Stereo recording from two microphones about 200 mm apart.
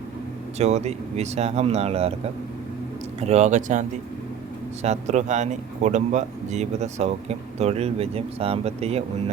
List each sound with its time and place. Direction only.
0.6 s speech: 35° right (ahead or behind)
3.2 s speech: 35° right (ahead or behind)